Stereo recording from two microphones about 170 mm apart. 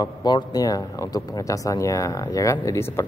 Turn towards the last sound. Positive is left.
turn(degrees=15)  # may be behind; listen again after turning